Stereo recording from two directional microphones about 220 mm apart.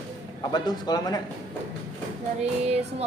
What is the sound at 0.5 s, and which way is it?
Speech, 20° left (ahead or behind).